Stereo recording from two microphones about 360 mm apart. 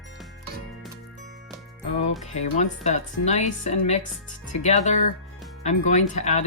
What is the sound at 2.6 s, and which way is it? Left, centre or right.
Speech, centre.